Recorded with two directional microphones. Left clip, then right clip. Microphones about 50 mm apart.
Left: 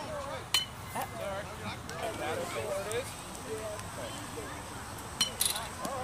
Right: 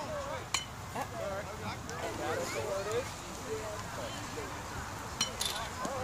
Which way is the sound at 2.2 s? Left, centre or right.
Centre.